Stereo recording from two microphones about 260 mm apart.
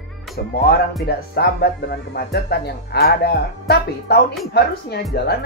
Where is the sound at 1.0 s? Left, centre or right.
Left.